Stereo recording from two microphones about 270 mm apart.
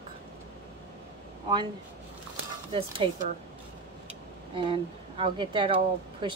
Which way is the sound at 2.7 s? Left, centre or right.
Centre.